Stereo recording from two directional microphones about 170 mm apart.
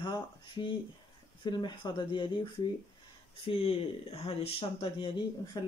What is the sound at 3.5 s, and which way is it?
Speech, 35° left (ahead or behind).